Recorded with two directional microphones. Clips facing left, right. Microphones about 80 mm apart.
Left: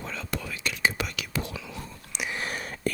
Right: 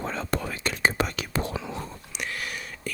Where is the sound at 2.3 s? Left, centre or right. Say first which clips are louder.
Left 3 dB; left.